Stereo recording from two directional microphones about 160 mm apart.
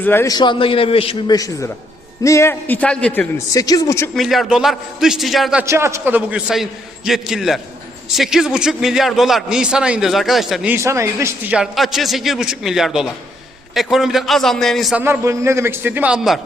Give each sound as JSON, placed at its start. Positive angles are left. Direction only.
{"t": 0.0, "sound": "a man's voice", "side_deg": 15}
{"t": 0.3, "sound": "a man's voice", "side_deg": 30}
{"t": 1.3, "sound": "a man's voice", "side_deg": 20}
{"t": 3.3, "sound": "speech", "side_deg": 20}
{"t": 4.1, "sound": "a man's voice", "side_deg": 0}
{"t": 5.6, "sound": "a man's voice", "side_deg": -15}
{"t": 10.8, "sound": "a man's voice", "side_deg": -15}
{"t": 11.5, "sound": "a man's voice", "side_deg": 0}
{"t": 15.0, "sound": "a man's voice", "side_deg": -15}